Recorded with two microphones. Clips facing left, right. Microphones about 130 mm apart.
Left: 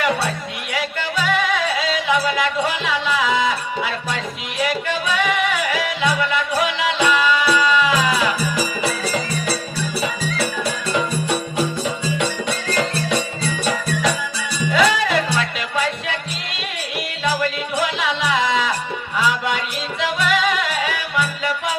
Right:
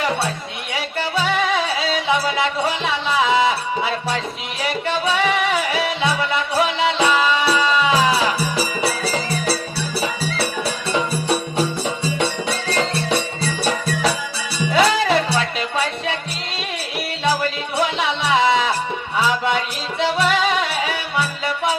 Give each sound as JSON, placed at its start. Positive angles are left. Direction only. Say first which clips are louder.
{"t": 0.7, "sound": "music", "louder": "right 1 dB", "side_deg": -30}
{"t": 14.7, "sound": "music", "louder": "right 1 dB", "side_deg": -35}
{"t": 17.7, "sound": "music", "louder": "right 2 dB", "side_deg": -35}